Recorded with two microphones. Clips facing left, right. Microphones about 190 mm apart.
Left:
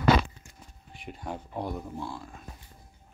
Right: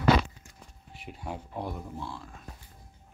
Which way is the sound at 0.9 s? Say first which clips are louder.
Left 1 dB; 5° right (ahead or behind).